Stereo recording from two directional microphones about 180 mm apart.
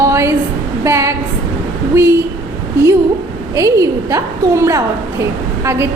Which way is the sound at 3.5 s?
15° right (ahead or behind).